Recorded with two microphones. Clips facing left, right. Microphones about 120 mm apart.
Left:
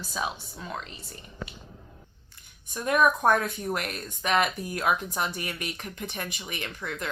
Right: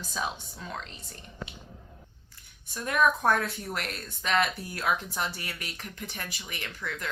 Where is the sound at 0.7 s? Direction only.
5° left (ahead or behind).